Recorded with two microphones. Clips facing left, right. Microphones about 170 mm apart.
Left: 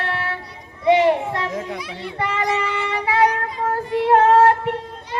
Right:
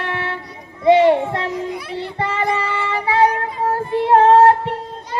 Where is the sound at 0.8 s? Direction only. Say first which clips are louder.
Right 3 dB; 30° right (ahead or behind).